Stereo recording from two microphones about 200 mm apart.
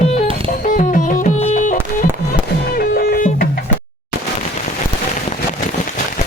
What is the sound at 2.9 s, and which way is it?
Music, 45° left (ahead or behind).